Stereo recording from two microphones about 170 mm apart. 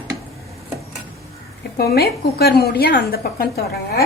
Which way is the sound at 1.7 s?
65° left (ahead or behind).